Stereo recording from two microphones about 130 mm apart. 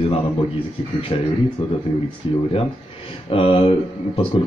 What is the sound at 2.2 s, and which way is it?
Speech, 45° left (ahead or behind).